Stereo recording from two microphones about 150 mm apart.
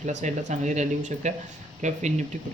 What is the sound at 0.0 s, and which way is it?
Speech, 55° right (ahead or behind).